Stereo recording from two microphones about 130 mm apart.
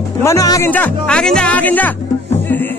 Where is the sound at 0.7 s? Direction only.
10° left (ahead or behind).